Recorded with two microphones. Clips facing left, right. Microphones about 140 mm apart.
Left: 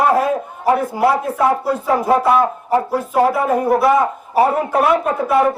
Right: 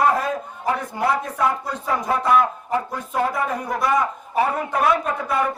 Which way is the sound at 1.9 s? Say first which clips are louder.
Left 5 dB; 30° left (ahead or behind).